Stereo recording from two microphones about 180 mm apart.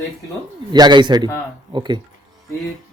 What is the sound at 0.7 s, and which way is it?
Speech, 25° right (ahead or behind).